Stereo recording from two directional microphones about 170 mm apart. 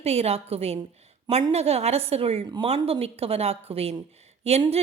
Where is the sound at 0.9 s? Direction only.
40° right (ahead or behind).